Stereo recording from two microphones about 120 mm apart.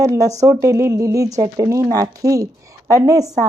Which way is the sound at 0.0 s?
25° right (ahead or behind).